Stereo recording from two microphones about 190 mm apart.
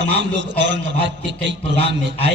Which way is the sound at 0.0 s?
70° right (ahead or behind).